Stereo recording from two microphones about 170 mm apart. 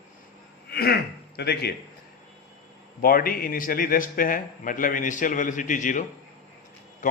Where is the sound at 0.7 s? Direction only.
65° left (ahead or behind).